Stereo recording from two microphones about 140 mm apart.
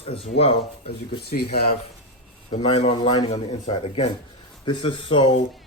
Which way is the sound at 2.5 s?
50° left (ahead or behind).